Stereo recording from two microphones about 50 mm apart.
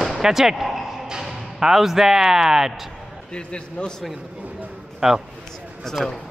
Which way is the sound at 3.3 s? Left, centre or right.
Centre.